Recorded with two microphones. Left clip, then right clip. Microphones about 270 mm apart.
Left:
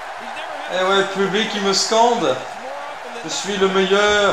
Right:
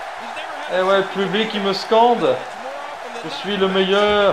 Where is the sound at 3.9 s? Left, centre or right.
Right.